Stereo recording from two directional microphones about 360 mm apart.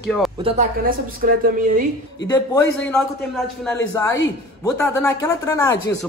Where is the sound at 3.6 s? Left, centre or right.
Centre.